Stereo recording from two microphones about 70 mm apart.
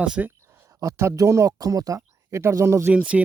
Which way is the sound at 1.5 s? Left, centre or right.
Right.